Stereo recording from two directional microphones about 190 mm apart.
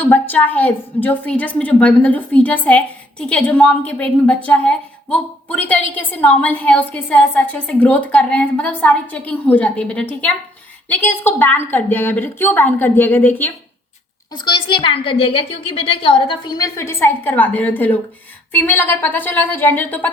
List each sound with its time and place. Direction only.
0.0 s a woman's voice: 10° left (ahead or behind)
14.3 s a woman's voice: 25° left (ahead or behind); by 20.1 s 10° left (ahead or behind)